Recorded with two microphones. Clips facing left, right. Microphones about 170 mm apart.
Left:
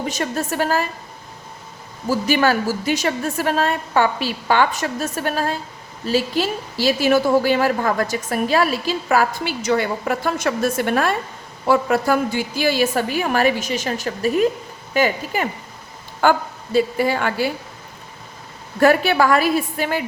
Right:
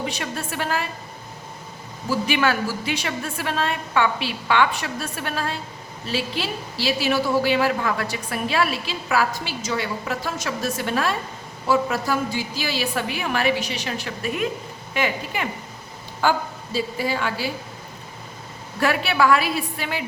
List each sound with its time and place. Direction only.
0.0 s a woman's voice: 45° left (ahead or behind)
2.0 s a woman's voice: 40° left (ahead or behind)
16.2 s a woman's voice: 55° left (ahead or behind)
18.8 s a woman's voice: 45° left (ahead or behind)